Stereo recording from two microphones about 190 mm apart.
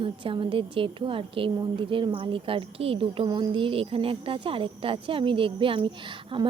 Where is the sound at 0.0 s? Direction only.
25° right (ahead or behind).